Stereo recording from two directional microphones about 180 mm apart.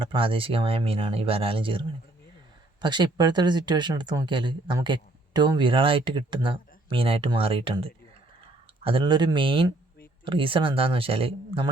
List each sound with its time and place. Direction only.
0.0 s speech: 30° right (ahead or behind)
2.8 s speech: 25° right (ahead or behind)